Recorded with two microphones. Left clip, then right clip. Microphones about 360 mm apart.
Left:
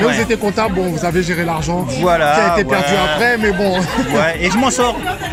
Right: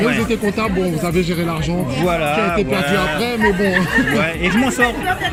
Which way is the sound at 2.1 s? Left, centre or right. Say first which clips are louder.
Left 6 dB; centre.